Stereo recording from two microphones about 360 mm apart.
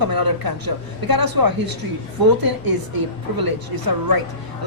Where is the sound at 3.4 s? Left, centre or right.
Right.